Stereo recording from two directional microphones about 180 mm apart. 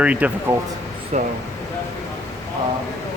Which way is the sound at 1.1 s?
40° right (ahead or behind).